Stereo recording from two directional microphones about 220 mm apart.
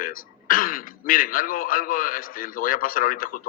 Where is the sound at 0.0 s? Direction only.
40° left (ahead or behind).